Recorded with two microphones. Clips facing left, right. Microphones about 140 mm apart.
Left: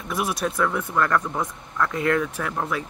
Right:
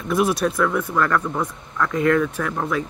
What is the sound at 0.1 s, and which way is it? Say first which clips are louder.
Speech: right 6 dB; 10° left (ahead or behind).